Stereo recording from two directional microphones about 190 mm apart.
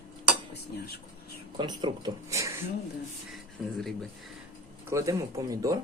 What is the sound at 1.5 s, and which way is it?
Speech, 25° right (ahead or behind).